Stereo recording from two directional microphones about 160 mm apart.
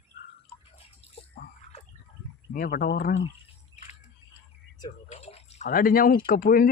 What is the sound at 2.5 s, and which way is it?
Speech, 65° left (ahead or behind).